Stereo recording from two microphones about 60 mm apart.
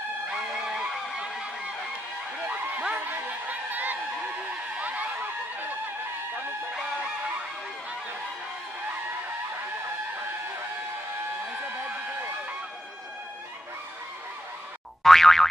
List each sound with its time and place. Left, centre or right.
0.3 s fowl: centre
2.4 s a sound: right
2.9 s honk: right
4.7 s a sound: right
6.7 s music: centre
15.0 s boing: centre